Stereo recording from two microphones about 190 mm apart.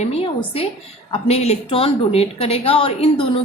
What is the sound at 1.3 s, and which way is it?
A woman's voice, 35° left (ahead or behind).